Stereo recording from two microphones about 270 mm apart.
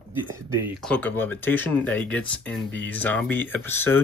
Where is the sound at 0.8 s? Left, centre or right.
Centre.